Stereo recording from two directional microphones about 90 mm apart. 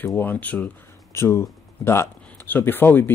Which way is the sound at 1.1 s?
30° left (ahead or behind).